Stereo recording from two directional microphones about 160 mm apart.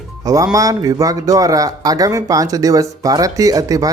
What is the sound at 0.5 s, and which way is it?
Speech, 20° right (ahead or behind).